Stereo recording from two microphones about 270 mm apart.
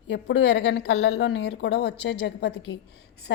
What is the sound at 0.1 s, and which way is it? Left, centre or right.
A woman's voice, left.